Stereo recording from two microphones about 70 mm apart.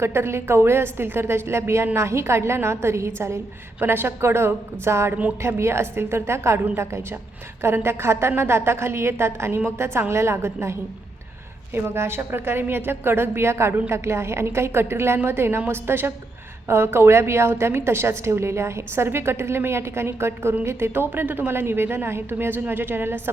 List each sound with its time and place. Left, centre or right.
0.0 s a woman's voice: right